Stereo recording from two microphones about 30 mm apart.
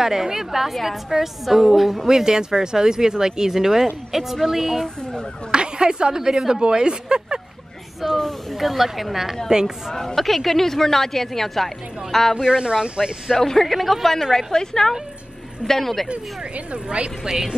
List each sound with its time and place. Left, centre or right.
0.0 s speech: centre
2.0 s speech: centre
5.5 s speech: right
8.1 s speech: centre
8.5 s speech: centre
9.5 s speech: right
9.9 s speech: centre
12.4 s speech: right
13.4 s speech: centre
13.7 s speech: centre
14.3 s a woman's voice: left
16.1 s speech: right
17.2 s speech: centre